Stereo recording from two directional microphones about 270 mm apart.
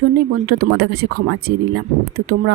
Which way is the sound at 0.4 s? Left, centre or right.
Right.